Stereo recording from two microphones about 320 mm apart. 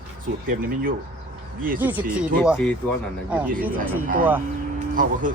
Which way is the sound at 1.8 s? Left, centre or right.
Centre.